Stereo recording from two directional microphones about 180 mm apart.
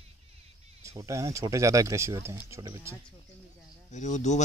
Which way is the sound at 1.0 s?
15° right (ahead or behind).